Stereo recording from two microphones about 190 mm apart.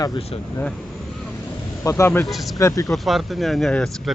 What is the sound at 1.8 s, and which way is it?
Speech, 15° left (ahead or behind).